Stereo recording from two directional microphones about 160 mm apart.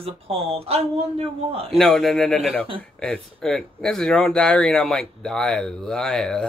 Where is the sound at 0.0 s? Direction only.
40° right (ahead or behind).